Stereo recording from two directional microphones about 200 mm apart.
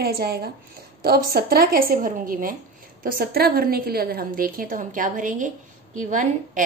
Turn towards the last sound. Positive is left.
turn(degrees=-40)  # may be behind; listen again after turning